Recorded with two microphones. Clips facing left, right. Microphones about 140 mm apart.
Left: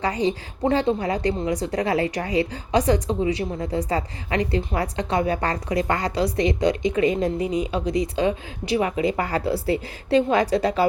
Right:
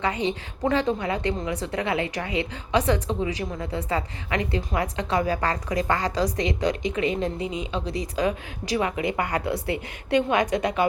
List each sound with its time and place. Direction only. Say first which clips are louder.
0.0 s a woman's voice: left 3 dB; 35° left (ahead or behind)
7.6 s speech: left 6 dB; 35° right (ahead or behind)
8.1 s a woman's voice: left 2 dB; 30° left (ahead or behind)